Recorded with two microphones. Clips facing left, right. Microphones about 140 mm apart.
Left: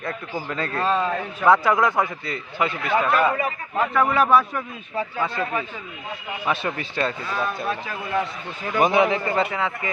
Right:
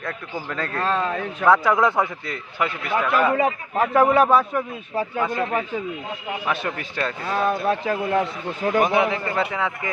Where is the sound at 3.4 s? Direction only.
25° right (ahead or behind).